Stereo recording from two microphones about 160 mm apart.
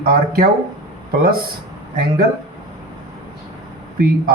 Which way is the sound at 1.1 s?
70° right (ahead or behind).